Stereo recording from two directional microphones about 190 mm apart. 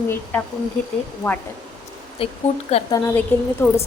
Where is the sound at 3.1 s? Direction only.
10° left (ahead or behind).